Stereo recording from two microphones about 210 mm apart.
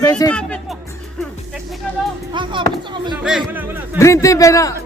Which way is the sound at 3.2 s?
5° right (ahead or behind).